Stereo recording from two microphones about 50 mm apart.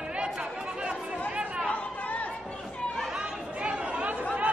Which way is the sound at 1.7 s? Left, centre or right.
Left.